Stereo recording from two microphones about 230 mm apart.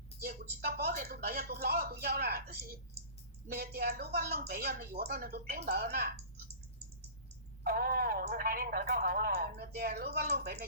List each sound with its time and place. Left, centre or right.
0.2 s a woman's voice: right
7.6 s a woman's voice: right